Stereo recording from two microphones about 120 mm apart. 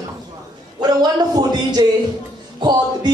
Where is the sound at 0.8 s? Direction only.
35° right (ahead or behind).